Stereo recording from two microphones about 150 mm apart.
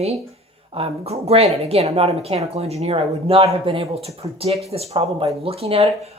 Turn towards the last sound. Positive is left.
turn(degrees=-40)  # may be behind; listen again after turning